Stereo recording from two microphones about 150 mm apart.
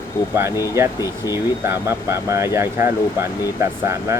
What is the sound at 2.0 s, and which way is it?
Speech, 20° right (ahead or behind).